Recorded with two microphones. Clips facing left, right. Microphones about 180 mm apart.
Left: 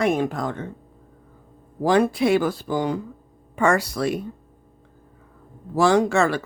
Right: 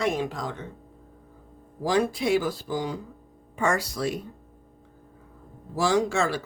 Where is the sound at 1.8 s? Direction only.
60° left (ahead or behind).